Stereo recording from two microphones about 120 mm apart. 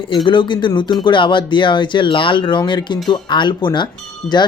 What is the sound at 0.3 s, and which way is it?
Speech, 40° left (ahead or behind).